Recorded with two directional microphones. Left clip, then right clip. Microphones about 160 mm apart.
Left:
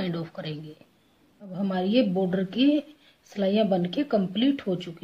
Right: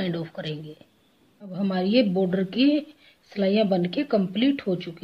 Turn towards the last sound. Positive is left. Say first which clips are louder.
# right 2 dB
turn(degrees=-10)  # may be behind; listen again after turning